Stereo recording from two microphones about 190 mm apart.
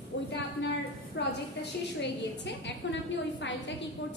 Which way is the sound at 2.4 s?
70° left (ahead or behind).